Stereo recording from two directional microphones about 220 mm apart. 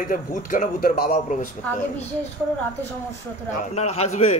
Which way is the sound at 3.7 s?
30° left (ahead or behind).